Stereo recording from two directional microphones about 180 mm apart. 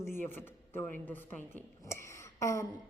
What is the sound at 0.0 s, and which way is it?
A man's voice, 15° left (ahead or behind).